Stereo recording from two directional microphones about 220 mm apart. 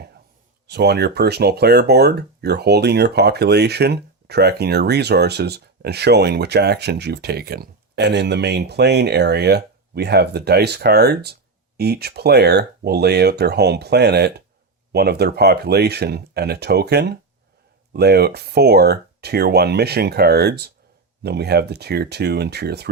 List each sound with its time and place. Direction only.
0.7 s speech: 50° right (ahead or behind)